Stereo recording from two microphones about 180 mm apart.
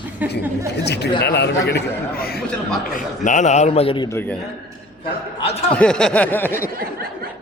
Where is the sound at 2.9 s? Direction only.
45° left (ahead or behind).